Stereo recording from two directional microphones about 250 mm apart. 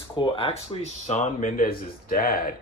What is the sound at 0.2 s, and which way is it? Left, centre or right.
Speech, left.